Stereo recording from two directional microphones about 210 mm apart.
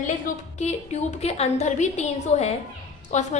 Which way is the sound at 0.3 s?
40° left (ahead or behind).